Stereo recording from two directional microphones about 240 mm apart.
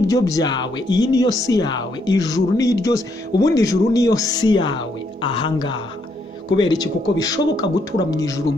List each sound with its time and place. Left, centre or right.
0.1 s speech: centre